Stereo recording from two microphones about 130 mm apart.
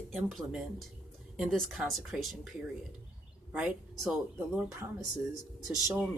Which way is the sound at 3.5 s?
5° right (ahead or behind).